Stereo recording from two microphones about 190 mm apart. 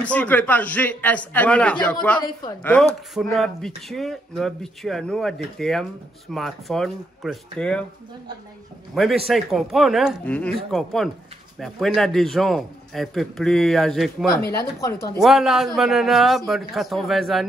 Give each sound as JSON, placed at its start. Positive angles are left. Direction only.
{"t": 0.0, "sound": "a man's voice", "side_deg": 5}
{"t": 8.9, "sound": "speech", "side_deg": 0}
{"t": 14.6, "sound": "a man's voice", "side_deg": 15}
{"t": 15.1, "sound": "speech", "side_deg": 0}